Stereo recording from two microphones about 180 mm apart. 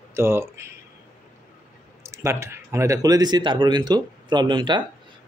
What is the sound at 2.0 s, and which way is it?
Speech, 15° right (ahead or behind).